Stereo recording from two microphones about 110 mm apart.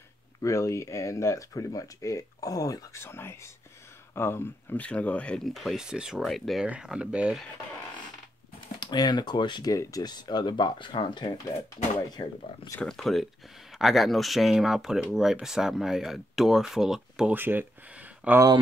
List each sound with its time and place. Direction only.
0.4 s speech: 30° left (ahead or behind); by 7.4 s 10° right (ahead or behind)
8.7 s speech: 40° left (ahead or behind)
12.8 s speech: centre (ahead or behind)
17.3 s speech: 20° right (ahead or behind)